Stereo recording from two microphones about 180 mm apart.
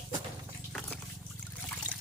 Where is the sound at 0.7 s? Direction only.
5° left (ahead or behind).